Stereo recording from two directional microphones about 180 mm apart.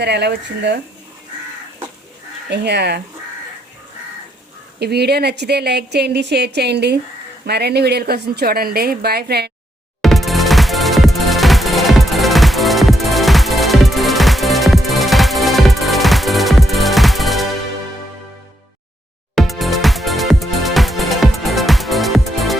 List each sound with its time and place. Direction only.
0.0 s speech: 65° right (ahead or behind)
2.5 s speech: 70° right (ahead or behind)
4.8 s a woman's voice: 65° right (ahead or behind)
10.0 s music: centre (ahead or behind)
19.4 s music: centre (ahead or behind)